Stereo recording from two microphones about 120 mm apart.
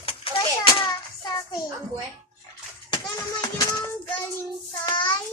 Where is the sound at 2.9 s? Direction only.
35° left (ahead or behind).